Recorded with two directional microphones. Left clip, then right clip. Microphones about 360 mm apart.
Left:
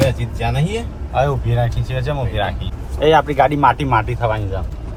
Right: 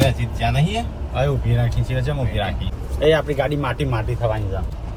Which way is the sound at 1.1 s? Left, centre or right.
Centre.